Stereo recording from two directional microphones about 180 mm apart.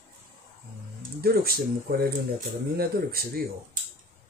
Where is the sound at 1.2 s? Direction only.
60° right (ahead or behind).